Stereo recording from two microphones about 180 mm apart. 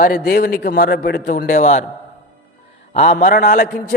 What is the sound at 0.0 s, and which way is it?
A man's voice, 55° left (ahead or behind).